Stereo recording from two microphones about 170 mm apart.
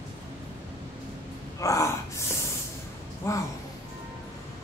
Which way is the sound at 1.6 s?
20° left (ahead or behind).